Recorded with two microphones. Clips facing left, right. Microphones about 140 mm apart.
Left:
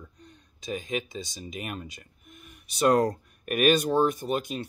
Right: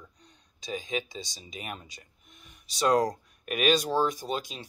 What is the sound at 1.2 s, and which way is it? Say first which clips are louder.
Speech: left 5 dB; 55° left (ahead or behind).